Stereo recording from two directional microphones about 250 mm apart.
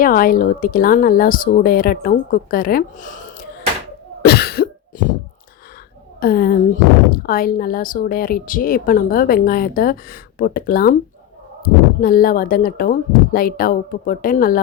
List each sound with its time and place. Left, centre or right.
0.0 s speech: left
4.2 s cough: left
6.1 s speech: left